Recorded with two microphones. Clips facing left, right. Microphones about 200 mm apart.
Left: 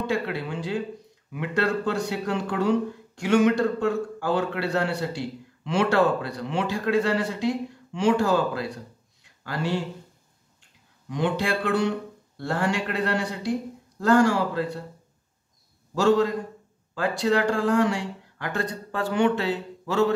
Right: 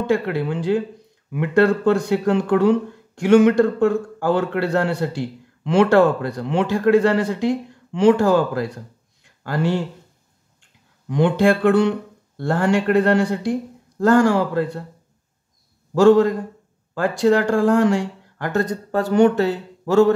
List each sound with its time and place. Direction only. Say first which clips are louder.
0.1 s a man's voice: right 7 dB; 50° right (ahead or behind)
11.1 s a man's voice: right 9 dB; 55° right (ahead or behind)
15.9 s a man's voice: right 7 dB; 50° right (ahead or behind)